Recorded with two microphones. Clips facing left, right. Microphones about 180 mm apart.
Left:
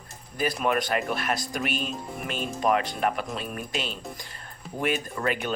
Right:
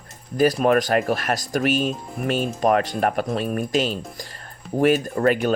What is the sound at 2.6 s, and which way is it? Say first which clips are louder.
Speech: right 4 dB; 45° right (ahead or behind).